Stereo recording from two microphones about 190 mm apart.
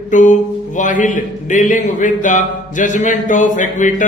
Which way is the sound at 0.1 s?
40° left (ahead or behind).